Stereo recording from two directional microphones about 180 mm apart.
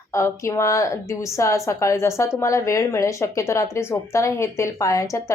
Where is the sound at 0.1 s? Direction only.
15° left (ahead or behind).